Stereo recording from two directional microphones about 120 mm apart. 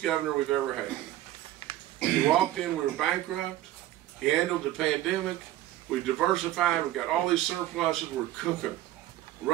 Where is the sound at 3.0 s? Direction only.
Centre (ahead or behind).